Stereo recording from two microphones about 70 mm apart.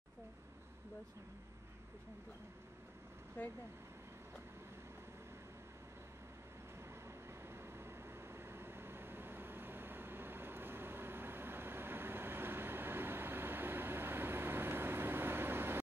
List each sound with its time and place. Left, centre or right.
6.8 s vehicle: right